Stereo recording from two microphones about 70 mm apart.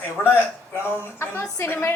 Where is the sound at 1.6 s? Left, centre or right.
Left.